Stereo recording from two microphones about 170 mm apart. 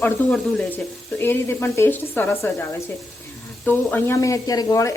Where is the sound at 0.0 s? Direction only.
10° left (ahead or behind).